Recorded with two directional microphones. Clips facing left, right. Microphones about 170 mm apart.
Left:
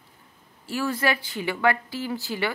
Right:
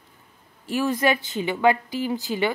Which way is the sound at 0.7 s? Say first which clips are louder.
Right 4 dB; 20° right (ahead or behind).